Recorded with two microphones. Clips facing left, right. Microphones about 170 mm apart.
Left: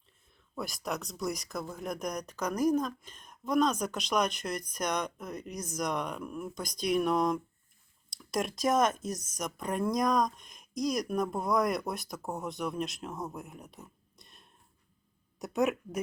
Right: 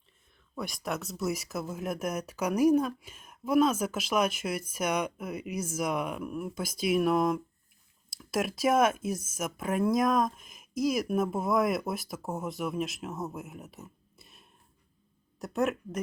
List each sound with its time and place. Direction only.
0.5 s speech: centre (ahead or behind)